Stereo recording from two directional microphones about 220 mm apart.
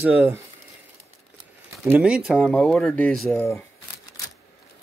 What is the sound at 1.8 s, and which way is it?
Speech, 5° right (ahead or behind).